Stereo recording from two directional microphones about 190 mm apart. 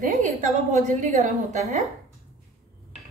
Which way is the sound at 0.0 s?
40° right (ahead or behind).